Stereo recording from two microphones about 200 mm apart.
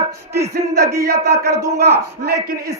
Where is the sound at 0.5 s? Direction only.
55° right (ahead or behind).